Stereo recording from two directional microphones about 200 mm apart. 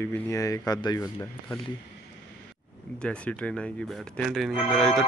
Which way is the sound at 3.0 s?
5° left (ahead or behind).